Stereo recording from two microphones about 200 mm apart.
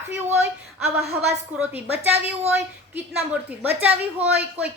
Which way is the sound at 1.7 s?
10° right (ahead or behind).